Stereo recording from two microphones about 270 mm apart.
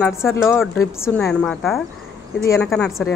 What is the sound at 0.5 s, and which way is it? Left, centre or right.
A woman's voice, centre.